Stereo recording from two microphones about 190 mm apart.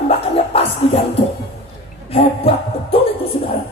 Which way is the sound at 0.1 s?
30° left (ahead or behind).